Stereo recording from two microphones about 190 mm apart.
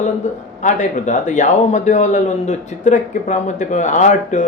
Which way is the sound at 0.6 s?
40° left (ahead or behind).